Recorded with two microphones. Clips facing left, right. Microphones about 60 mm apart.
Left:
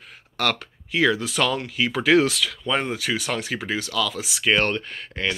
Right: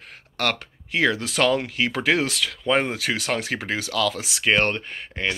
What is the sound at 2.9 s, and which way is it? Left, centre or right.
Speech, right.